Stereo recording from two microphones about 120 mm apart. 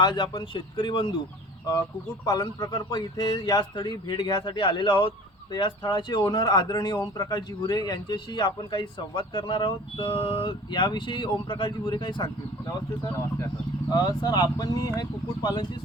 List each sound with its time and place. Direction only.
0.0 s speech: 40° left (ahead or behind)
2.2 s speech: 35° left (ahead or behind)